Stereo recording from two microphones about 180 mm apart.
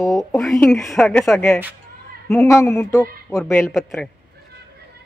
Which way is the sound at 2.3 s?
15° left (ahead or behind).